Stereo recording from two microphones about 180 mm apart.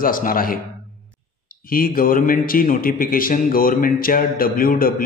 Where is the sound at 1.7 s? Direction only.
50° left (ahead or behind).